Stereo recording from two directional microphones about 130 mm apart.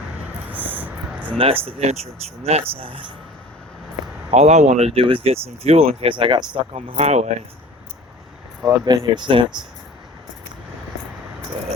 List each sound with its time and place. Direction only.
0.4 s a sound: 15° right (ahead or behind)
1.6 s speech: 50° right (ahead or behind)
4.3 s speech: 60° right (ahead or behind); by 6.7 s 40° right (ahead or behind)
6.7 s speech: 50° right (ahead or behind)
8.6 s speech: 30° right (ahead or behind)